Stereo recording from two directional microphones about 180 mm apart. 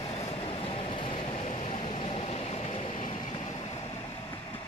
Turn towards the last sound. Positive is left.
turn(degrees=35)  # may be behind; listen again after turning